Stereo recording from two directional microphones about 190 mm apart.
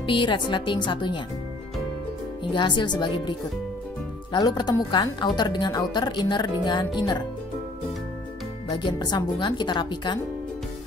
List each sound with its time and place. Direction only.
0.0 s a woman's voice: 25° left (ahead or behind)
2.5 s a woman's voice: 25° left (ahead or behind)
8.6 s a woman's voice: 25° left (ahead or behind)